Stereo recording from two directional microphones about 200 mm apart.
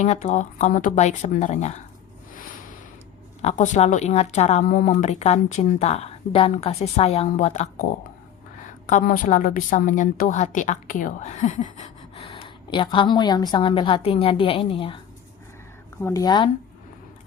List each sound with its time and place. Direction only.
0.0 s a woman's voice: 35° left (ahead or behind)
2.3 s a sound: 45° left (ahead or behind)
3.4 s a woman's voice: 35° left (ahead or behind)
8.9 s a woman's voice: 40° left (ahead or behind)
12.3 s a woman's voice: 25° left (ahead or behind)
16.0 s a woman's voice: 15° left (ahead or behind)